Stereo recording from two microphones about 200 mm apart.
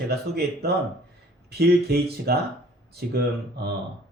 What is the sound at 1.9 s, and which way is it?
Speech, 55° right (ahead or behind).